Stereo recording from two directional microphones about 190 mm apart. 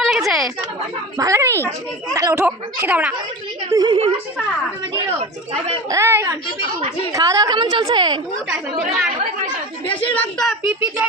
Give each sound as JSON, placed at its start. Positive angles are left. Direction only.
{"t": 0.0, "sound": "a sound", "side_deg": 0}
{"t": 1.2, "sound": "speech", "side_deg": -15}
{"t": 3.7, "sound": "a woman's voice", "side_deg": -25}
{"t": 5.9, "sound": "a woman's voice", "side_deg": -15}
{"t": 10.2, "sound": "a woman's voice", "side_deg": 5}